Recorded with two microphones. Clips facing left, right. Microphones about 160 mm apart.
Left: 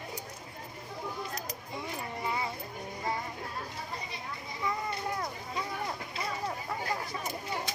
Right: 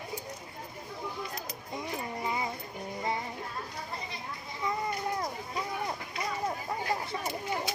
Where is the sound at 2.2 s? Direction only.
15° right (ahead or behind).